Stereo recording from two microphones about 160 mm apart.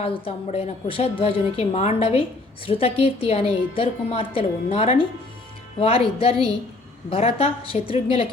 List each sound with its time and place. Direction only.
0.0 s a woman's voice: 35° left (ahead or behind)